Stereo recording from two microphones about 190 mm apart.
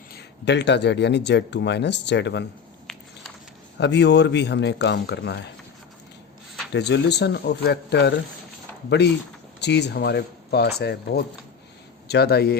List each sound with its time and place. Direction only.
0.1 s speech: 60° left (ahead or behind)
2.9 s a sound: centre (ahead or behind)
3.8 s speech: 65° left (ahead or behind)
6.7 s speech: 65° left (ahead or behind)
9.6 s speech: 65° left (ahead or behind)